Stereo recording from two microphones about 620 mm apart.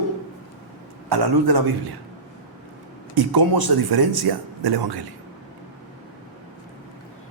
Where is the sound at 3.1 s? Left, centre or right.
Right.